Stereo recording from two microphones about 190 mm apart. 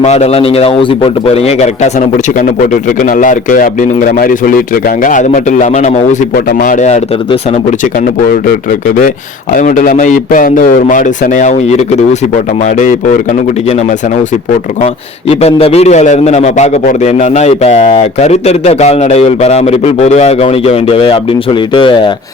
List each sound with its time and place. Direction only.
0.0 s a man's voice: 35° left (ahead or behind)
3.0 s a man's voice: 45° left (ahead or behind)
9.6 s a man's voice: 45° left (ahead or behind)
12.8 s a man's voice: 40° left (ahead or behind)
15.3 s a man's voice: 30° left (ahead or behind)